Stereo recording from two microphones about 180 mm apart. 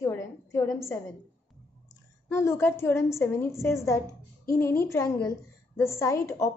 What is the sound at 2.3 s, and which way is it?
A woman's voice, 15° left (ahead or behind).